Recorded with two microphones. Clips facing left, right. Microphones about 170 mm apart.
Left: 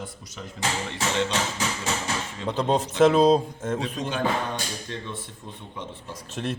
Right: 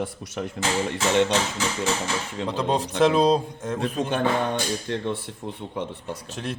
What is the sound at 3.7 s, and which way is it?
Speech, 55° right (ahead or behind).